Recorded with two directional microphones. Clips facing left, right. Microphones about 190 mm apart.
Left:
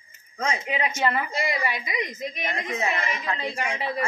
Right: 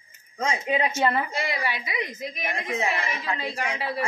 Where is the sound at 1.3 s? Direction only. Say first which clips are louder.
Left 2 dB; centre (ahead or behind).